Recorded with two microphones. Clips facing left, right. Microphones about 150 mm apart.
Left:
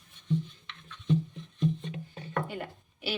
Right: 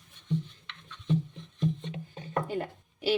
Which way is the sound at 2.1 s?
30° right (ahead or behind).